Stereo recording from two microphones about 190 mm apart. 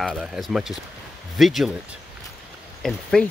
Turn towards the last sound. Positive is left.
turn(degrees=0)  # may be behind; listen again after turning